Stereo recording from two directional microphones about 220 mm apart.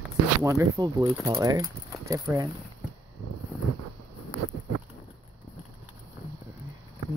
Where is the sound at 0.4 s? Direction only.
15° right (ahead or behind).